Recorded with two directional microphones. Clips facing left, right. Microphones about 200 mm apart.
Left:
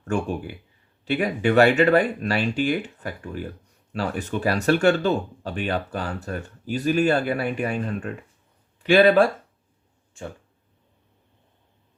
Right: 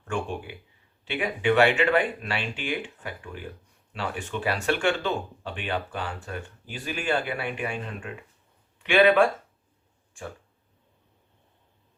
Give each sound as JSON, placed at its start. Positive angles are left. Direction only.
{"t": 0.1, "sound": "speech", "side_deg": 40}